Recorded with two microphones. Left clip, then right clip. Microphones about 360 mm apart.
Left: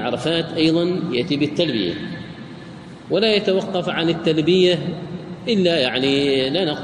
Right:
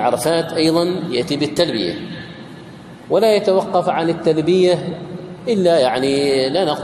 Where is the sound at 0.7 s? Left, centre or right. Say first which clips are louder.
Right 3 dB; centre.